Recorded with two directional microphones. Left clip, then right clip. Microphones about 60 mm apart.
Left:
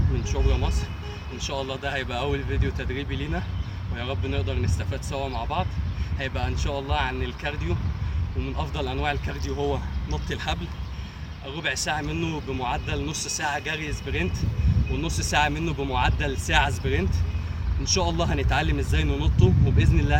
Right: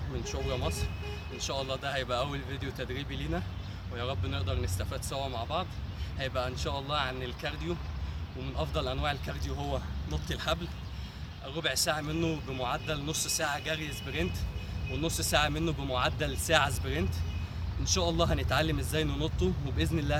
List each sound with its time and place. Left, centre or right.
0.2 s speech: right
11.4 s speech: right